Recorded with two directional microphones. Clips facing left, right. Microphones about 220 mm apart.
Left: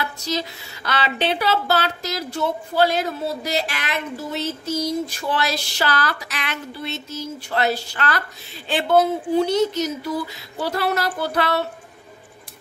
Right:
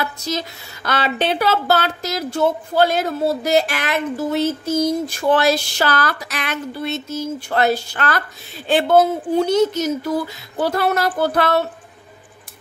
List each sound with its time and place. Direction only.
0.8 s speech: 45° right (ahead or behind)